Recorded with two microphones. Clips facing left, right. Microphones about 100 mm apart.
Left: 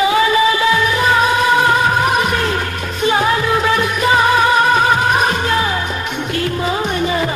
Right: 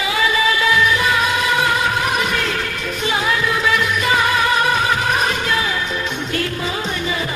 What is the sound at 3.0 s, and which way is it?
Music, 40° left (ahead or behind).